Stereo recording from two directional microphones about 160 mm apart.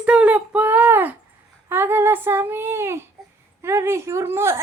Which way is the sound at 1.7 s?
15° right (ahead or behind).